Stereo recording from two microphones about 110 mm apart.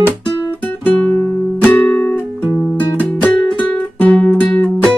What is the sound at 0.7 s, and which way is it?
Music, 10° left (ahead or behind).